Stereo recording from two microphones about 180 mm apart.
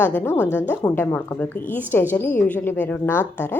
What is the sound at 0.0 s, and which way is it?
A woman's voice, 10° left (ahead or behind).